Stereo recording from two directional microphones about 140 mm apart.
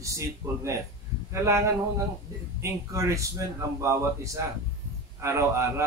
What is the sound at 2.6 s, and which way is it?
A man's voice, 20° right (ahead or behind).